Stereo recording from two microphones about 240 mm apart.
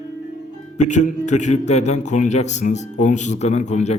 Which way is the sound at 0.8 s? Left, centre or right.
Left.